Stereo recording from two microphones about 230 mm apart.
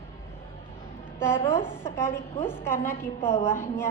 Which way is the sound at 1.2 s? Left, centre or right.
Centre.